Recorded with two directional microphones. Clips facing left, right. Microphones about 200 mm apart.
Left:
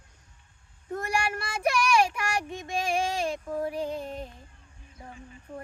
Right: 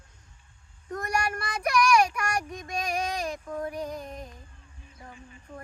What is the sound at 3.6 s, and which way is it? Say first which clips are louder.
Female singing: left 3 dB; 30° left (ahead or behind).